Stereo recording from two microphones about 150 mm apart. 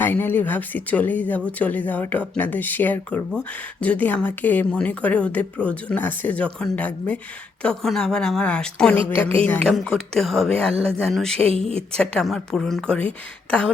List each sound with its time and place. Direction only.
0.0 s a woman's voice: 15° left (ahead or behind)